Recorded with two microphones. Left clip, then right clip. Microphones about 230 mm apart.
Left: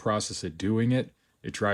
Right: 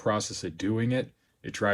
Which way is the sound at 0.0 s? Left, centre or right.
Left.